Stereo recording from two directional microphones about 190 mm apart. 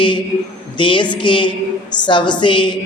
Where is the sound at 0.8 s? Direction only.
25° left (ahead or behind).